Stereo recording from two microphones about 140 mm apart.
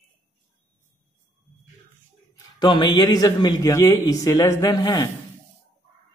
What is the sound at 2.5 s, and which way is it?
A man's voice, 30° left (ahead or behind).